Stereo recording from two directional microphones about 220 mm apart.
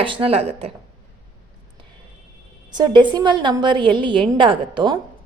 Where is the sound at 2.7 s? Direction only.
20° right (ahead or behind).